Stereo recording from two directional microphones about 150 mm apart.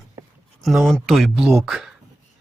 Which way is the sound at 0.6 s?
Centre (ahead or behind).